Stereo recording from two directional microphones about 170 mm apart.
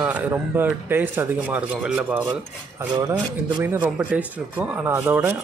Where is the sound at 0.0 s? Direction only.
10° right (ahead or behind).